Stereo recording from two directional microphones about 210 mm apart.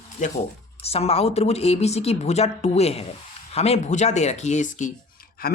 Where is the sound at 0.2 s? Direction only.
35° left (ahead or behind).